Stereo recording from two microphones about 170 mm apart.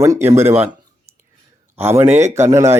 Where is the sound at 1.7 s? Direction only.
15° right (ahead or behind).